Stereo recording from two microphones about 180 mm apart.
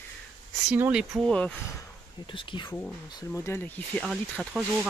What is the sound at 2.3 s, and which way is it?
Speech, 30° left (ahead or behind).